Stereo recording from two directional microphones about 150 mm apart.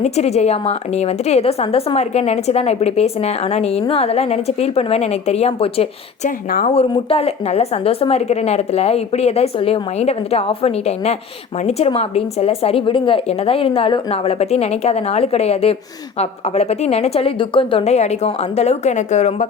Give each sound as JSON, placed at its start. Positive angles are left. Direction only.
{"t": 0.0, "sound": "a woman's voice", "side_deg": 45}
{"t": 6.2, "sound": "speech", "side_deg": 70}
{"t": 6.7, "sound": "a woman's voice", "side_deg": 40}